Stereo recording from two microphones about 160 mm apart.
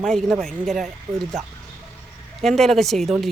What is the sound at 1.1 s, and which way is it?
Speech, 15° right (ahead or behind).